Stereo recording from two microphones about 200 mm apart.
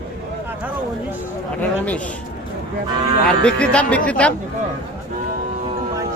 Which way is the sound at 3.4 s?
5° left (ahead or behind).